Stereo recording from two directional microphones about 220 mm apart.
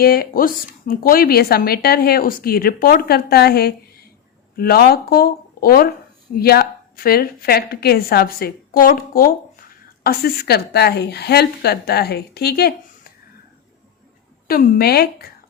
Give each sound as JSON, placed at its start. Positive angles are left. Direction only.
{"t": 0.0, "sound": "speech", "side_deg": 45}
{"t": 14.4, "sound": "speech", "side_deg": 40}